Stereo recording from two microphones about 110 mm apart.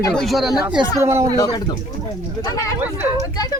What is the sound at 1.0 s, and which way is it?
Speech, 25° right (ahead or behind).